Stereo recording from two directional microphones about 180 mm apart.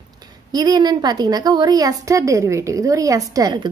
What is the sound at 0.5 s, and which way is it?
A woman's voice, 20° right (ahead or behind).